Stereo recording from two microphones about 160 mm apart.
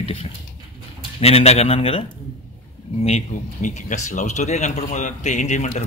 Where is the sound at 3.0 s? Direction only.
45° left (ahead or behind).